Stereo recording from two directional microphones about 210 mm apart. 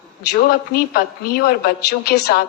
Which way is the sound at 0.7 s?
45° left (ahead or behind).